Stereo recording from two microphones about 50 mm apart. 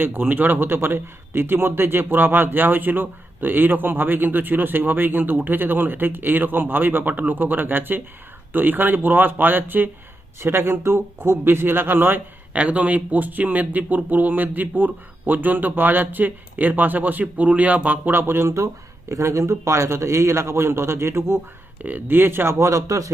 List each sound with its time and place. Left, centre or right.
0.0 s a man's voice: right
10.4 s speech: right
12.5 s speech: right
18.4 s speech: right
22.0 s speech: right